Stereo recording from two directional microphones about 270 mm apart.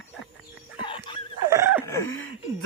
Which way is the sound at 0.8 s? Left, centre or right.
Centre.